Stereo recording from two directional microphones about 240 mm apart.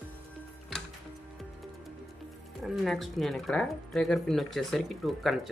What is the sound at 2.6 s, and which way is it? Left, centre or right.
Speech, centre.